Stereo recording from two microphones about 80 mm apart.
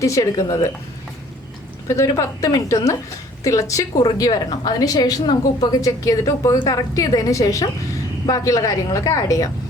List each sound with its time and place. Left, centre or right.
0.0 s a woman's voice: left
1.9 s a woman's voice: left